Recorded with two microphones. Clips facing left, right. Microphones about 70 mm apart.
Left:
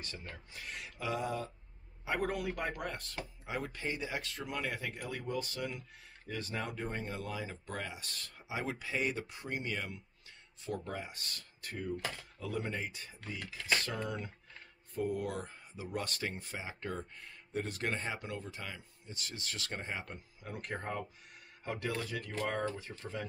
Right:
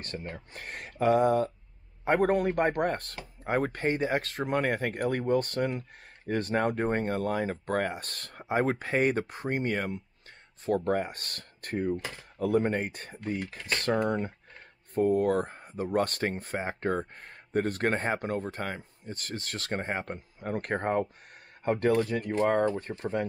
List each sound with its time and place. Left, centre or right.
0.0 s speech: right
12.0 s speech: right
12.4 s speech: right
22.2 s speech: right
22.9 s speech: right